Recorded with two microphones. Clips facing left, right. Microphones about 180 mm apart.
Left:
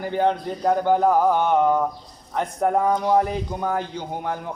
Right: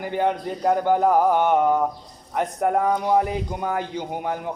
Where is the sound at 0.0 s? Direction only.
10° right (ahead or behind).